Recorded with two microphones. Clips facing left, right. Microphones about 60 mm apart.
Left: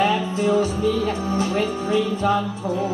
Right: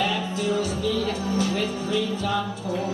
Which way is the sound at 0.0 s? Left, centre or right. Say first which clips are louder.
Left 6 dB; left.